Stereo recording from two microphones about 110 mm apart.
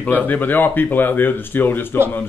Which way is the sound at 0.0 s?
15° left (ahead or behind).